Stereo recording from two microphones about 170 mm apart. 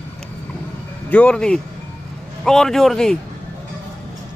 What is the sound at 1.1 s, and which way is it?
Speech, 5° left (ahead or behind).